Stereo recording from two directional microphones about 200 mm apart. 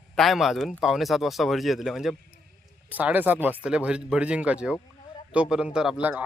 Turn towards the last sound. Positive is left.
turn(degrees=-5)  # may be behind; listen again after turning